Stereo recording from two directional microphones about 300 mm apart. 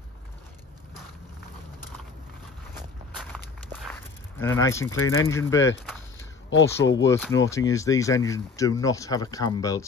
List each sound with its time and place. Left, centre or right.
4.4 s speech: centre
4.9 s speech: left
5.3 s speech: centre
6.1 s a sound: left
7.4 s speech: centre